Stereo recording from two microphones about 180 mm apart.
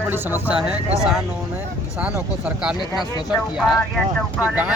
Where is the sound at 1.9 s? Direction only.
5° right (ahead or behind).